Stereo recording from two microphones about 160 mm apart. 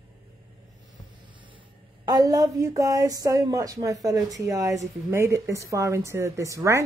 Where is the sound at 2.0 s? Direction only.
25° right (ahead or behind).